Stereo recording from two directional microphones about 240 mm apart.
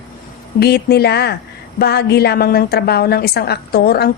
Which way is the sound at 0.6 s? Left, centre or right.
Left.